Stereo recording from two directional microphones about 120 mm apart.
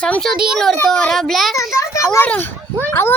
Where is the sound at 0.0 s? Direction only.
5° left (ahead or behind).